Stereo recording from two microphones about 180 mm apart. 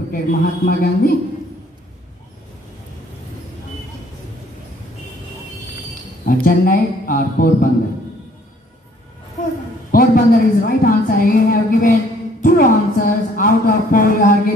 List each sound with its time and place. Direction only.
0.1 s a man's voice: 50° left (ahead or behind)
6.2 s a man's voice: 55° left (ahead or behind)
9.8 s a woman's voice: 50° left (ahead or behind)